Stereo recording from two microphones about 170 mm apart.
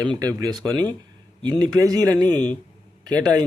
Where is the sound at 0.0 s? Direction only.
20° right (ahead or behind).